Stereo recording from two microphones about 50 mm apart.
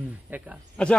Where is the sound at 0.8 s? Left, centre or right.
Centre.